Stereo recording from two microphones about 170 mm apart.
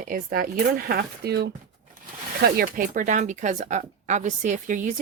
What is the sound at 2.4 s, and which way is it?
Speech, 60° right (ahead or behind).